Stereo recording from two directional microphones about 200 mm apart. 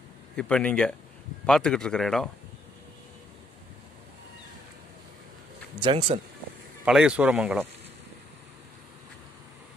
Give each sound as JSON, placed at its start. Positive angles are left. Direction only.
{"t": 0.4, "sound": "a man's voice", "side_deg": 5}
{"t": 5.8, "sound": "speech", "side_deg": -25}
{"t": 6.8, "sound": "a man's voice", "side_deg": -5}